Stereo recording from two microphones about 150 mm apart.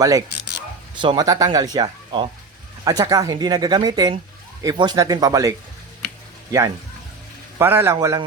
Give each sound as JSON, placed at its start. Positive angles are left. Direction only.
{"t": 0.0, "sound": "a man's voice", "side_deg": -25}